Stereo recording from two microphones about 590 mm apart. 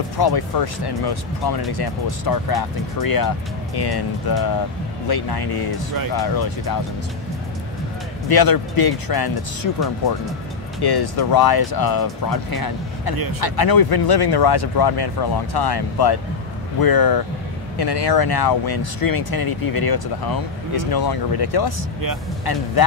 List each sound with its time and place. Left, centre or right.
0.2 s speech: left
8.3 s speech: left
10.8 s speech: left
13.1 s speech: right
13.4 s speech: left